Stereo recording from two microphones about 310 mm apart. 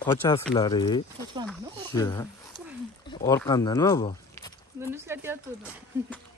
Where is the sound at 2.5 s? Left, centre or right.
Centre.